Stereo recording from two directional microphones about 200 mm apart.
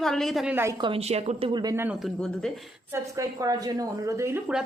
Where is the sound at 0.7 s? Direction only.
25° right (ahead or behind).